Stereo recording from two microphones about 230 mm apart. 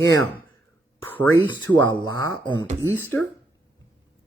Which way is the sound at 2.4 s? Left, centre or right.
Centre.